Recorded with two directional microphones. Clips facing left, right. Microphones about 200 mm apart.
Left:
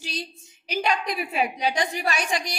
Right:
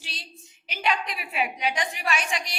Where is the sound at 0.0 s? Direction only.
45° left (ahead or behind).